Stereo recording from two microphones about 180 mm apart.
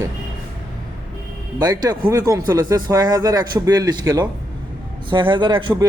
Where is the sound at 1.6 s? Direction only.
20° right (ahead or behind).